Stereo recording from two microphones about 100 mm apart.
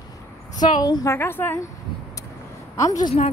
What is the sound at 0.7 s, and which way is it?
Speech, 45° left (ahead or behind).